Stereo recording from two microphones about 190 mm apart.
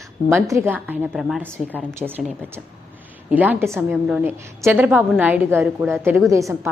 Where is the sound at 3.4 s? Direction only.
10° right (ahead or behind).